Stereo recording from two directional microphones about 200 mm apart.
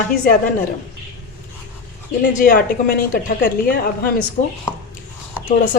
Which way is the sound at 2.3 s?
45° left (ahead or behind).